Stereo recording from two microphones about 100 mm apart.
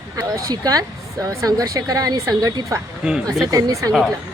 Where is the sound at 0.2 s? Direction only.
35° right (ahead or behind).